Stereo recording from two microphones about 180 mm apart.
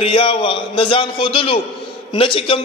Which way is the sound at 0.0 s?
30° left (ahead or behind).